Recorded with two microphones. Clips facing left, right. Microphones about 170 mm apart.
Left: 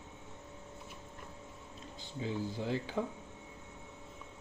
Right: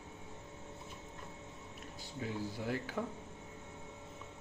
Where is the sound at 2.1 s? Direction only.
25° left (ahead or behind).